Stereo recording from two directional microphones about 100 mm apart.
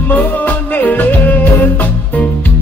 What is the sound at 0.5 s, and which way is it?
Music, 15° left (ahead or behind).